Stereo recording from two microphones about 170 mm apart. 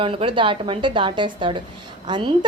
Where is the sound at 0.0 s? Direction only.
30° right (ahead or behind).